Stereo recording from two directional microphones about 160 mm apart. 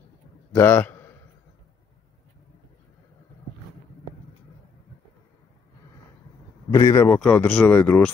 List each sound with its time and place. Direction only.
0.5 s a sound: 15° left (ahead or behind)
6.7 s a man's voice: 20° left (ahead or behind)
7.1 s speech: 5° left (ahead or behind)